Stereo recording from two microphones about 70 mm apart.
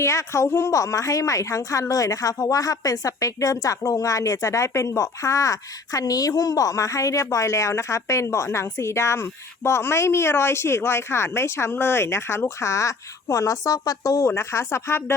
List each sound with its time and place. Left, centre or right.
0.0 s a woman's voice: left
14.3 s speech: left